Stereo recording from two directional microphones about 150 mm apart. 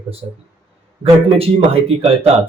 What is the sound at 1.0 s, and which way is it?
Speech, 40° right (ahead or behind).